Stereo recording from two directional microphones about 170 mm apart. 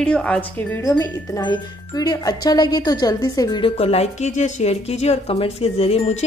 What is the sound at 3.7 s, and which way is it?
Speech, 40° left (ahead or behind).